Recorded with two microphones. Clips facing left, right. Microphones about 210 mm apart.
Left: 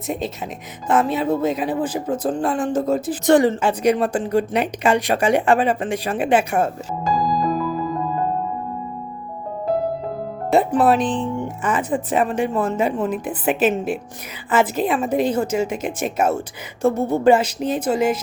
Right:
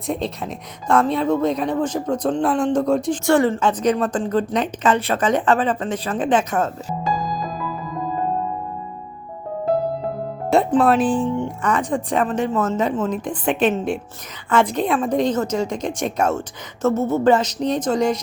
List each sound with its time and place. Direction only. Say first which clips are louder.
0.9 s speech: right 1 dB; 5° left (ahead or behind)
3.2 s a woman's voice: left 3 dB; 15° left (ahead or behind)
10.5 s music: even; 5° left (ahead or behind)
11.0 s speech: right 3 dB; 5° right (ahead or behind)
11.3 s a woman's voice: right 1 dB; 5° left (ahead or behind)